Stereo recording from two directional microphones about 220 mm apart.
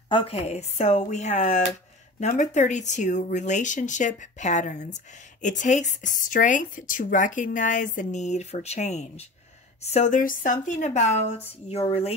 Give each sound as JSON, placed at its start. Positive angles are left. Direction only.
{"t": 0.1, "sound": "speech", "side_deg": 25}